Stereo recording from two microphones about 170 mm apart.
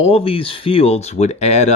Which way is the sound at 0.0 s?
35° left (ahead or behind).